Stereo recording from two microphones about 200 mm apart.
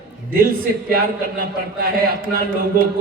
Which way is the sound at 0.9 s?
45° right (ahead or behind).